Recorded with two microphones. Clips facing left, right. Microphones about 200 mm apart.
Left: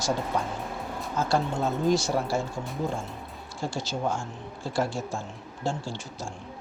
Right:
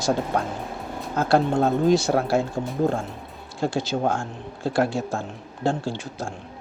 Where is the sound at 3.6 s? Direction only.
60° right (ahead or behind).